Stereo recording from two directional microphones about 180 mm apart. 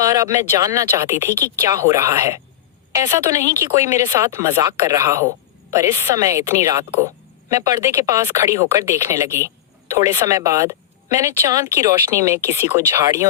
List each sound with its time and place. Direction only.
0.0 s speech: 20° right (ahead or behind)